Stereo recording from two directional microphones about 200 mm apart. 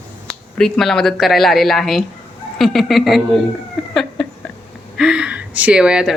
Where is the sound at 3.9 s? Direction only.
Centre (ahead or behind).